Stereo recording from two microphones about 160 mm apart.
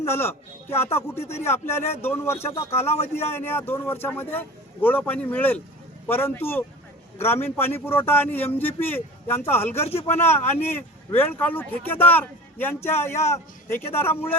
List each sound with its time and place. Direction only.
0.0 s a man's voice: 15° left (ahead or behind)
2.9 s a man's voice: 40° left (ahead or behind)
3.2 s a man's voice: 15° left (ahead or behind)
9.8 s a man's voice: 40° left (ahead or behind)
10.1 s a man's voice: 15° left (ahead or behind)